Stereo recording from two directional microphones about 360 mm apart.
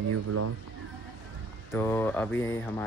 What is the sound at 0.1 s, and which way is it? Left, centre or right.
Speech, right.